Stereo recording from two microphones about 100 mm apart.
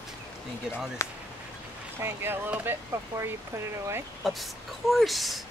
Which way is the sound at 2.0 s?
20° right (ahead or behind).